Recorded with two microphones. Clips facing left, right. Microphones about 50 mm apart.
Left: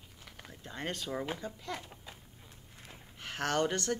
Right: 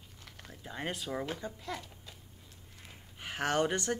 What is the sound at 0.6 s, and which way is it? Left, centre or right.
Speech, centre.